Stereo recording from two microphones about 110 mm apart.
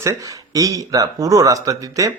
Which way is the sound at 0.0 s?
30° right (ahead or behind).